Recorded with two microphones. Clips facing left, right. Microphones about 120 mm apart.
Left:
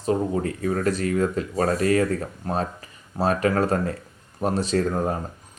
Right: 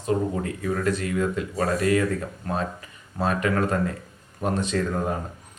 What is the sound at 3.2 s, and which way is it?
Speech, 35° left (ahead or behind).